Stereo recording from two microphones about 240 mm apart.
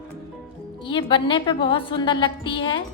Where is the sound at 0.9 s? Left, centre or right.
Centre.